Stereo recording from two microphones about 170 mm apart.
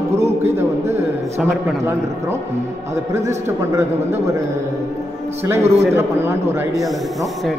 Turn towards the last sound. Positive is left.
turn(degrees=-15)  # may be behind; listen again after turning